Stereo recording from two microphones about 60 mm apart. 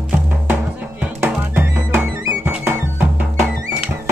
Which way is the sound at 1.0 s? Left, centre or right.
Right.